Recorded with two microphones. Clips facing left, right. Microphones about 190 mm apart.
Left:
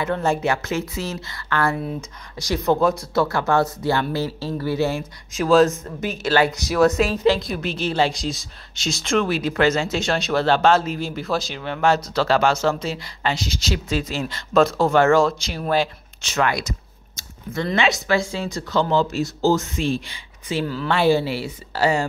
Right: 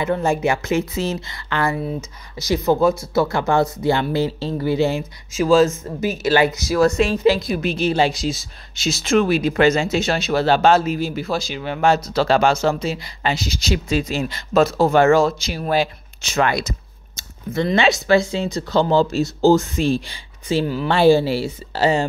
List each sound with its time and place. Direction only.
0.0 s speech: 10° right (ahead or behind)
2.4 s speech: 5° right (ahead or behind)
3.2 s speech: 15° right (ahead or behind)
5.3 s speech: centre (ahead or behind)
6.7 s speech: centre (ahead or behind)
16.3 s speech: 25° right (ahead or behind)
20.6 s speech: 15° right (ahead or behind)
20.9 s speech: 30° right (ahead or behind)